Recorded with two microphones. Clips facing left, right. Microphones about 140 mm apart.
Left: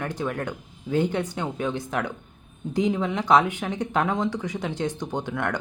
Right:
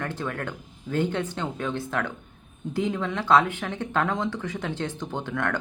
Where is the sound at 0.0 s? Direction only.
15° left (ahead or behind).